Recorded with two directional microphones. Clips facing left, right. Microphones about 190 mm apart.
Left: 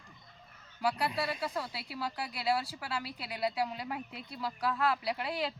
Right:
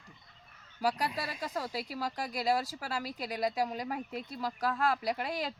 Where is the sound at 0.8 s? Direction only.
40° right (ahead or behind).